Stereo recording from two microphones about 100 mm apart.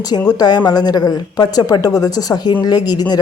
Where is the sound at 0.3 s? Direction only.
40° left (ahead or behind).